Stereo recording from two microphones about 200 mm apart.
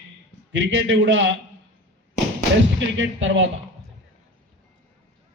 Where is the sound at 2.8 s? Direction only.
70° right (ahead or behind).